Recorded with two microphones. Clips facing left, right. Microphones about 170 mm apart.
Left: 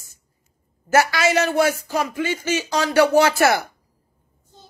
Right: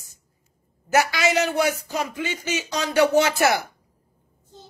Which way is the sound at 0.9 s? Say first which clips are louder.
Left 3 dB; 15° right (ahead or behind).